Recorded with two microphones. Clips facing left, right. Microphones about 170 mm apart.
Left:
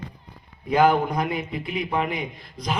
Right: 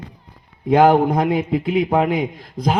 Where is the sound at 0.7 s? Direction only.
85° right.